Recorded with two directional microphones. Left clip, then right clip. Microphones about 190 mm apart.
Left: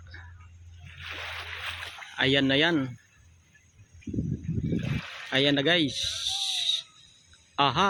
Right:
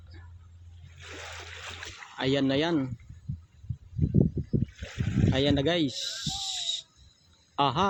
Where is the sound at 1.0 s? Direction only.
45° right (ahead or behind).